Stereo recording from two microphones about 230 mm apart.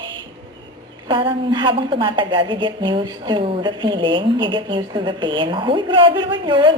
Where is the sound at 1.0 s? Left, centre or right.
Right.